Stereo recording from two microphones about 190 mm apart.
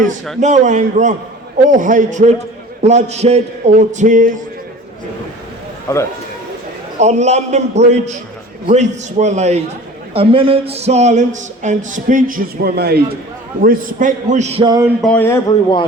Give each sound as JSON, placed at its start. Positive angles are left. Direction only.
{"t": 0.3, "sound": "a man's voice", "side_deg": -40}
{"t": 5.9, "sound": "speech", "side_deg": 15}
{"t": 7.0, "sound": "speech", "side_deg": -35}
{"t": 13.6, "sound": "a man's voice", "side_deg": -45}
{"t": 14.6, "sound": "a sound", "side_deg": -20}
{"t": 15.0, "sound": "speech", "side_deg": 10}